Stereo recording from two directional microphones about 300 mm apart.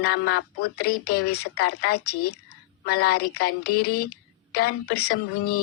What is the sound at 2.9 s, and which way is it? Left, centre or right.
A woman's voice, left.